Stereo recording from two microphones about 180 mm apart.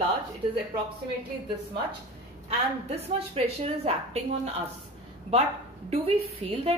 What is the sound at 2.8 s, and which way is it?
A woman's voice, 35° right (ahead or behind).